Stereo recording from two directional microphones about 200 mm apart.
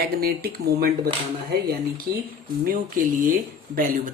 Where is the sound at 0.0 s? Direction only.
50° right (ahead or behind).